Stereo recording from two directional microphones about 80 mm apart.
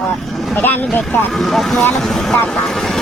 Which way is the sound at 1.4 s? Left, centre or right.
Centre.